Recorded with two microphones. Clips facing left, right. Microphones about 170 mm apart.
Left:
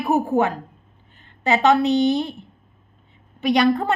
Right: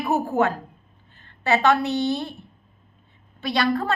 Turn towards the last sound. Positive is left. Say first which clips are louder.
# left 5 dB
turn(degrees=20)  # may be behind; listen again after turning